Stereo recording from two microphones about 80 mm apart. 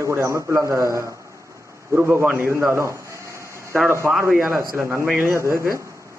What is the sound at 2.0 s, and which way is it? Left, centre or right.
Speech, right.